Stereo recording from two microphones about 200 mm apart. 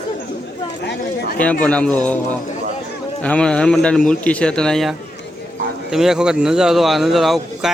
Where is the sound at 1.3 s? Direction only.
5° left (ahead or behind).